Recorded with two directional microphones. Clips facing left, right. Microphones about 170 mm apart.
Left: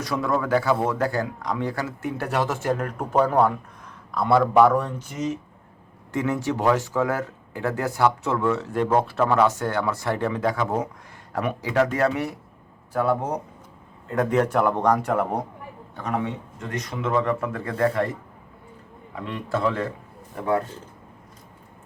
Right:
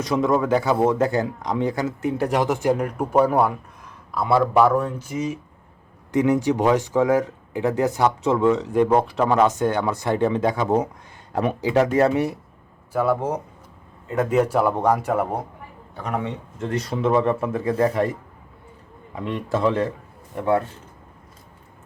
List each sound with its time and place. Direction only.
0.0 s speech: 20° right (ahead or behind)
12.9 s a man's voice: 5° right (ahead or behind)
16.6 s speech: 30° right (ahead or behind); by 18.1 s 15° right (ahead or behind)
19.1 s speech: 20° right (ahead or behind)